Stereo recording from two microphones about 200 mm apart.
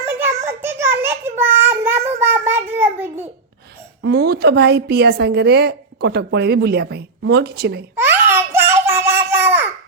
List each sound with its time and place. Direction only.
0.0 s child singing: 10° right (ahead or behind)
4.0 s a woman's voice: 55° right (ahead or behind)
7.9 s babbling: 10° right (ahead or behind)